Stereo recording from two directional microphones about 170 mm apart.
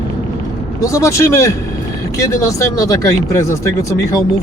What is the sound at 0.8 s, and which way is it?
Speech, 20° left (ahead or behind).